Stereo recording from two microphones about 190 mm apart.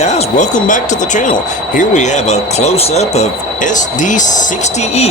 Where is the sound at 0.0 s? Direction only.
35° left (ahead or behind).